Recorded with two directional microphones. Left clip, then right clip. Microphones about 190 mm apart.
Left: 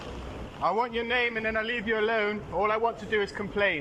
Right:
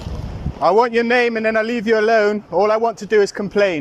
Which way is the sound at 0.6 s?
55° right (ahead or behind).